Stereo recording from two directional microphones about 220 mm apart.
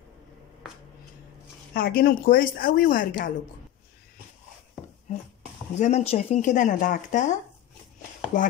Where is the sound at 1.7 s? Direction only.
40° left (ahead or behind).